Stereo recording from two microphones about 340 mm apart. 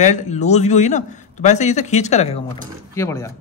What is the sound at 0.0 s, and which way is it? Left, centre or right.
Speech, centre.